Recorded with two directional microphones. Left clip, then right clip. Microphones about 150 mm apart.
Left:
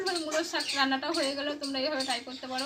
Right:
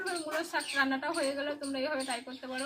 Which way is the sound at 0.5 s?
5° right (ahead or behind).